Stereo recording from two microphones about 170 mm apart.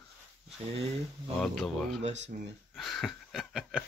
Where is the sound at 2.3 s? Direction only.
50° right (ahead or behind).